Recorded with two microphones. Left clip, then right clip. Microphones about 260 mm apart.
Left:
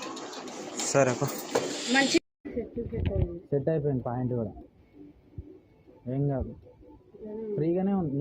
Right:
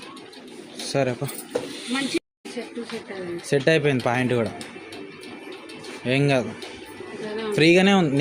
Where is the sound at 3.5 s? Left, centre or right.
Right.